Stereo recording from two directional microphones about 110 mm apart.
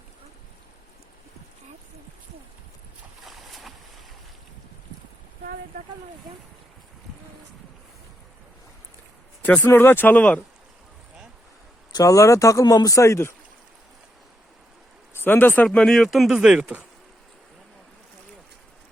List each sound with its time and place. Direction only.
3.2 s boat: centre (ahead or behind)
9.4 s speech: 15° left (ahead or behind)
11.9 s speech: 35° left (ahead or behind)
15.1 s speech: 20° left (ahead or behind); by 16.8 s 10° right (ahead or behind)